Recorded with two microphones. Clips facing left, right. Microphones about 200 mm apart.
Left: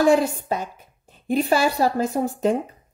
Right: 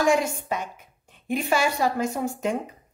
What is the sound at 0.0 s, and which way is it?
A woman's voice, 35° left (ahead or behind).